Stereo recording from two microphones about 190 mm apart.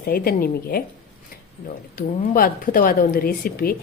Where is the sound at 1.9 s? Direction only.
45° left (ahead or behind).